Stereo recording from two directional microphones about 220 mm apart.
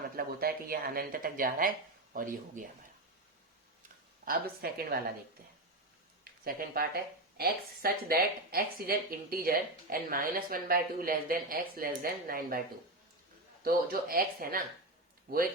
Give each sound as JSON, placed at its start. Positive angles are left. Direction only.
{"t": 0.2, "sound": "speech", "side_deg": -45}
{"t": 4.3, "sound": "speech", "side_deg": -45}
{"t": 6.4, "sound": "speech", "side_deg": -40}
{"t": 13.7, "sound": "speech", "side_deg": -40}